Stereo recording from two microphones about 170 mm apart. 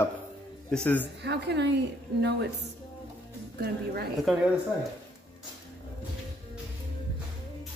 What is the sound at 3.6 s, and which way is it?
Speech, 65° right (ahead or behind).